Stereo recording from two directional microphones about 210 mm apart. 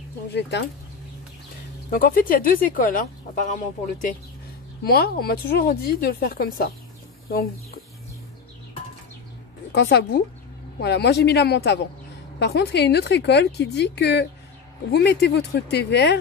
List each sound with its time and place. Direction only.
0.3 s speech: 55° left (ahead or behind)
1.9 s speech: 45° left (ahead or behind)
4.8 s a woman's voice: 45° left (ahead or behind)
9.7 s a woman's voice: 50° left (ahead or behind)